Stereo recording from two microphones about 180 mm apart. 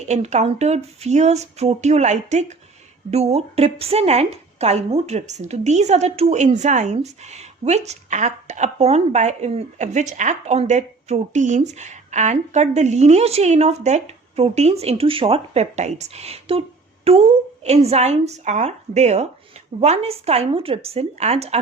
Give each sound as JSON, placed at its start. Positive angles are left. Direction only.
{"t": 0.1, "sound": "a woman's voice", "side_deg": -40}